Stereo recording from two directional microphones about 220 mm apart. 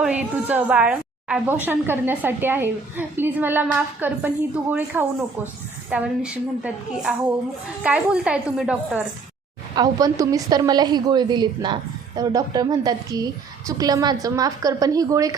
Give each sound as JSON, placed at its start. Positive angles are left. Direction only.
{"t": 0.0, "sound": "a woman's voice", "side_deg": -5}
{"t": 9.7, "sound": "a woman's voice", "side_deg": -15}